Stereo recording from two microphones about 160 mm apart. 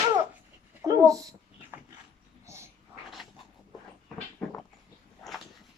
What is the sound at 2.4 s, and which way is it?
Dog, 15° right (ahead or behind).